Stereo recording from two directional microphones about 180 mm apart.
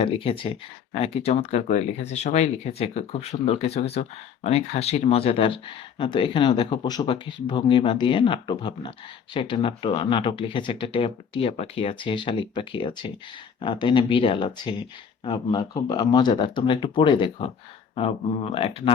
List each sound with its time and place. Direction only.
0.0 s speech: 30° left (ahead or behind)